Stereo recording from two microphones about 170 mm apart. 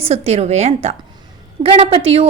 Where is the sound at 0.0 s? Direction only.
35° right (ahead or behind).